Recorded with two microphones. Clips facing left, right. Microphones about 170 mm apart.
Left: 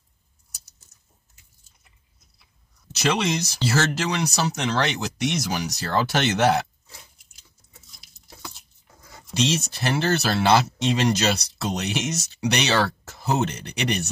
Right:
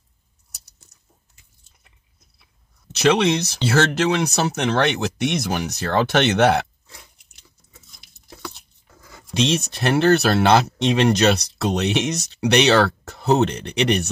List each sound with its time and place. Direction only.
2.9 s speech: 60° right (ahead or behind)
8.0 s a sound: 55° right (ahead or behind)
9.1 s speech: 60° right (ahead or behind)